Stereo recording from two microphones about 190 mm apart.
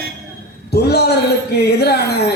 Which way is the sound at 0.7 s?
60° left (ahead or behind).